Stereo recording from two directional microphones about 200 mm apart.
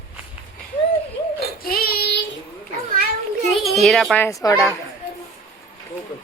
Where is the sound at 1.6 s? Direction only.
50° left (ahead or behind).